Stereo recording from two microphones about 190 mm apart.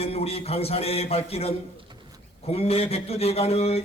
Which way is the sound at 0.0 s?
30° left (ahead or behind).